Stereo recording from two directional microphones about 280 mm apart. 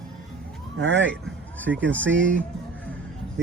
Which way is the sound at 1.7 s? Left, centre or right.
Right.